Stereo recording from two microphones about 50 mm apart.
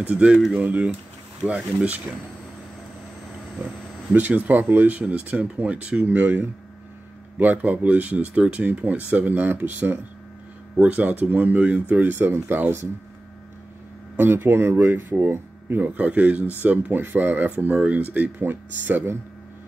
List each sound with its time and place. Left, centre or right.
0.1 s speech: right
4.1 s speech: right
14.1 s speech: right
15.8 s speech: right